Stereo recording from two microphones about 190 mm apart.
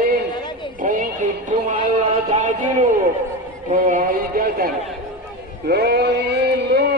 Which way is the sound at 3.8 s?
45° right (ahead or behind).